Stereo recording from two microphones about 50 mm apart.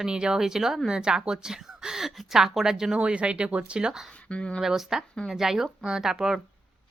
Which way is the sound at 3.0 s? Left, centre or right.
Right.